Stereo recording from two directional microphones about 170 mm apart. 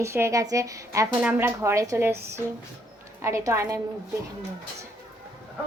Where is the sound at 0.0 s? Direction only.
15° right (ahead or behind).